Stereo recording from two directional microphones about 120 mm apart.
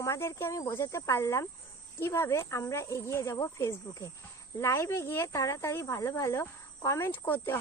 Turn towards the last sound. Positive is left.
turn(degrees=20)  # may be behind; listen again after turning